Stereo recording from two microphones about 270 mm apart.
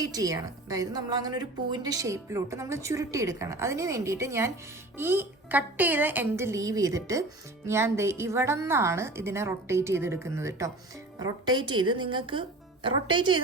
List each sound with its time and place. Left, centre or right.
0.0 s a woman's voice: centre